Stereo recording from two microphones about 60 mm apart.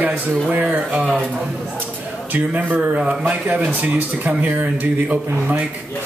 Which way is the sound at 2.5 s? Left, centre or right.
Right.